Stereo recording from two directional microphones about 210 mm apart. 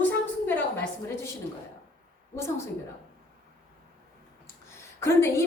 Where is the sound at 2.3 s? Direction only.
15° left (ahead or behind).